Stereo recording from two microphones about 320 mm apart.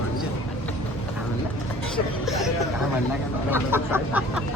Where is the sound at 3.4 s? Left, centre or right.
Centre.